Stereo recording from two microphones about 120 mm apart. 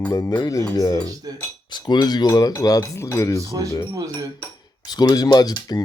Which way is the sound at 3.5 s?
30° right (ahead or behind).